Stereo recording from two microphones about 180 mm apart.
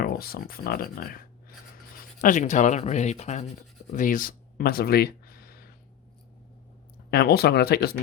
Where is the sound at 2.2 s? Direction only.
45° left (ahead or behind).